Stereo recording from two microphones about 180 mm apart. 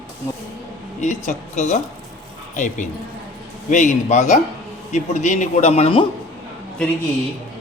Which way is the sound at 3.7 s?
45° left (ahead or behind).